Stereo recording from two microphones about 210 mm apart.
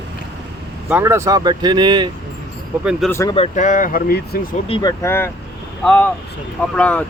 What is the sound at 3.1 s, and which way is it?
Speech, 15° left (ahead or behind).